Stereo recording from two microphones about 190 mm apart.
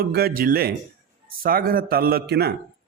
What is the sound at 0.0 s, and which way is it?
A man's voice, 55° right (ahead or behind).